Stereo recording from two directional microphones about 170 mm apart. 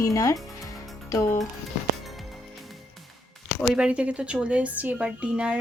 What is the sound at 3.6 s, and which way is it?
A woman's voice, 5° right (ahead or behind).